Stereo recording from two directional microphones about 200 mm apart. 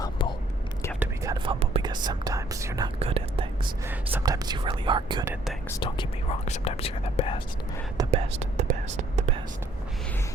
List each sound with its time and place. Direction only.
0.0 s whispering: 20° left (ahead or behind)
0.9 s whispering: 15° right (ahead or behind)
3.0 s whispering: 30° right (ahead or behind)
3.8 s speech: 15° right (ahead or behind)
5.8 s speech: 30° left (ahead or behind)
8.1 s whispering: 35° right (ahead or behind)